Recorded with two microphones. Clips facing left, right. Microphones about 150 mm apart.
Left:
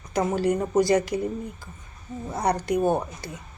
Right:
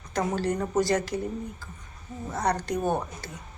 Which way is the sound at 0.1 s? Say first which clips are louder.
Left 4 dB; 15° left (ahead or behind).